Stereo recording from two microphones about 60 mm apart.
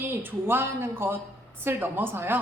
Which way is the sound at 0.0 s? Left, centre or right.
Right.